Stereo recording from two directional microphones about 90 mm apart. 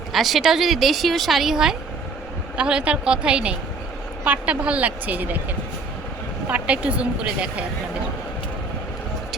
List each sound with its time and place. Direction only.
0.1 s a woman's voice: centre (ahead or behind); by 5.4 s 20° right (ahead or behind)
6.5 s a woman's voice: 15° right (ahead or behind)